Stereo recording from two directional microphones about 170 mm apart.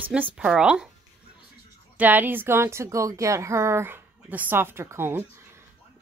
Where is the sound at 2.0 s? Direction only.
10° right (ahead or behind).